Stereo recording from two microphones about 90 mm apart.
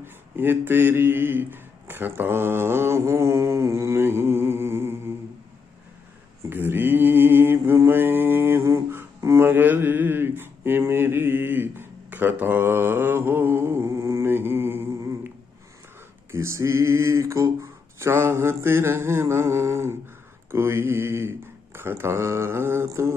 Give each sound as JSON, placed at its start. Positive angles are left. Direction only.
{"t": 0.0, "sound": "speech", "side_deg": -25}
{"t": 6.5, "sound": "mantra", "side_deg": -25}
{"t": 16.3, "sound": "speech", "side_deg": -30}